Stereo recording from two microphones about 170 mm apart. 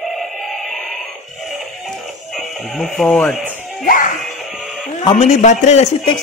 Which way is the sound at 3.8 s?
55° left (ahead or behind).